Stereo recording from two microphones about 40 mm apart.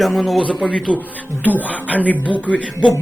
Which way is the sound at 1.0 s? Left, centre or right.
Left.